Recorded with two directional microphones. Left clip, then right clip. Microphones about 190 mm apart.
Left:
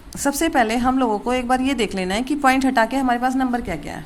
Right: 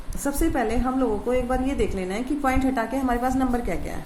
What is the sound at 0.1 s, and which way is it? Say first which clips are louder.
A woman's voice: left 5 dB; 45° left (ahead or behind).